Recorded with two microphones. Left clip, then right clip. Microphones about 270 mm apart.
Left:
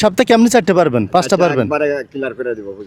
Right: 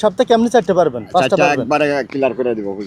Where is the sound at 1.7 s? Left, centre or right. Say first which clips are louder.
Right 1 dB; centre.